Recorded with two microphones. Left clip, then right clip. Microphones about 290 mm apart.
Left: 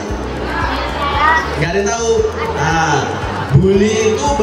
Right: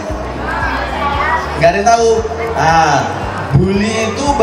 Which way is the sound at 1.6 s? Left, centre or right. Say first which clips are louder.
Right 7 dB; right.